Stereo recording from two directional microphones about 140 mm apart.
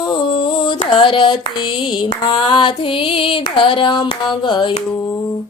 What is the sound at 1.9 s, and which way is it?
Mantra, 35° left (ahead or behind).